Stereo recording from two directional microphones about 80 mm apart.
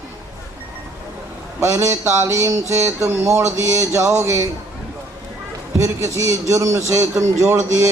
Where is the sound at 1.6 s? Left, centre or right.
Right.